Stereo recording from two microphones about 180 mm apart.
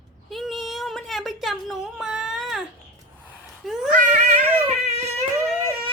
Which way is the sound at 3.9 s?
45° right (ahead or behind).